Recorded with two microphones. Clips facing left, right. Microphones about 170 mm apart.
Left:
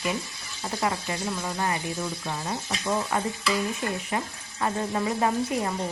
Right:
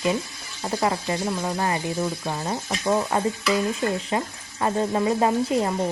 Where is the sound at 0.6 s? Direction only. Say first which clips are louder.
Right 4 dB; 40° right (ahead or behind).